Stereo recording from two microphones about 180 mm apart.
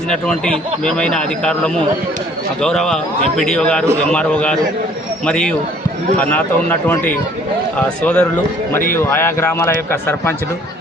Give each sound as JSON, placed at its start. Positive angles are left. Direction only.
{"t": 0.1, "sound": "a man's voice", "side_deg": 5}